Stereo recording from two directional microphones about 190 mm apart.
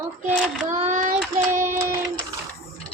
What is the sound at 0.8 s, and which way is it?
Child singing, 40° right (ahead or behind).